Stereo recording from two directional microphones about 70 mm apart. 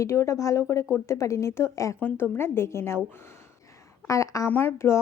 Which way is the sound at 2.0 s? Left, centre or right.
Left.